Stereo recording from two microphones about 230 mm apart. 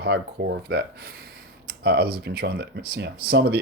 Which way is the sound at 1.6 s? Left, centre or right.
Right.